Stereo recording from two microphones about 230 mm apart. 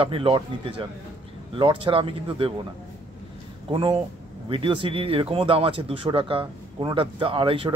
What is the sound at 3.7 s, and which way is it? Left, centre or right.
Speech, right.